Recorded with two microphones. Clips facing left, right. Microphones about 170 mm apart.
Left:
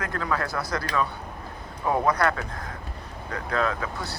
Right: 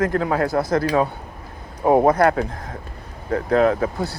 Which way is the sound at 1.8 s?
55° right (ahead or behind).